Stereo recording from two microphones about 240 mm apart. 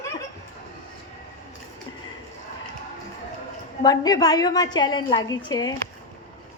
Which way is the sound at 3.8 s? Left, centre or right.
Centre.